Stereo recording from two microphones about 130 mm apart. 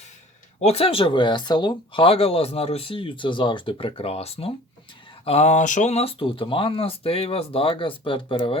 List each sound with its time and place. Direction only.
0.6 s speech: 50° left (ahead or behind)